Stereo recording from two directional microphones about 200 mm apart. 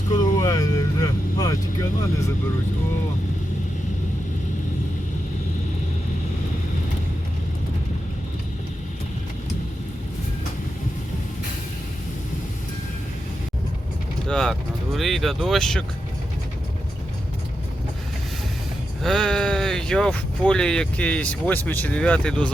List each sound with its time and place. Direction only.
0.1 s vehicle: 20° left (ahead or behind)
14.3 s vehicle: 5° left (ahead or behind)
14.9 s speech: centre (ahead or behind)
19.0 s speech: 5° left (ahead or behind)